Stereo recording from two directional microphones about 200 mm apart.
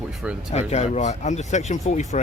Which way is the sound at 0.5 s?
35° left (ahead or behind).